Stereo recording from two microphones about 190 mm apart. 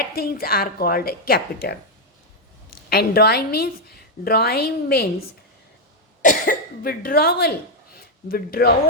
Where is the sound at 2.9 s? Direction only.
55° left (ahead or behind).